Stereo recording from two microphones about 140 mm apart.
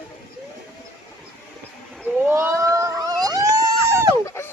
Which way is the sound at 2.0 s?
15° right (ahead or behind).